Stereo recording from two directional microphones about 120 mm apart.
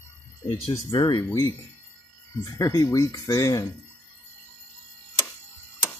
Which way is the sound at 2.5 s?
25° left (ahead or behind).